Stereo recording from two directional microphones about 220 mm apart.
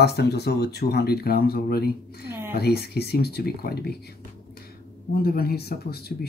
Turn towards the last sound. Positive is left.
turn(degrees=45)  # may be behind; listen again after turning